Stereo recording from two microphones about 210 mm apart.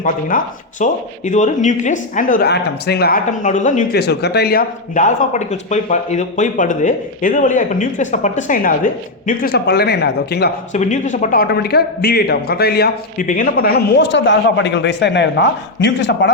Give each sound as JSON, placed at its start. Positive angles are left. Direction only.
{"t": 0.0, "sound": "speech", "side_deg": 40}
{"t": 4.0, "sound": "speech", "side_deg": 50}
{"t": 10.7, "sound": "a man's voice", "side_deg": 35}